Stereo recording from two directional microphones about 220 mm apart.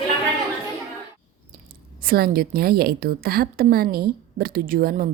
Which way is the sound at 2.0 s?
45° right (ahead or behind).